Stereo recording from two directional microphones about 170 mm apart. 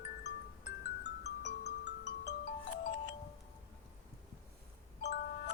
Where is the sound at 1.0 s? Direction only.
85° left.